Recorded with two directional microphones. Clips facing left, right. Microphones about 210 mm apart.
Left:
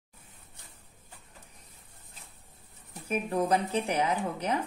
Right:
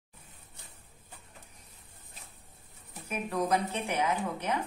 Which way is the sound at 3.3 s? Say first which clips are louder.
Left 1 dB; 30° left (ahead or behind).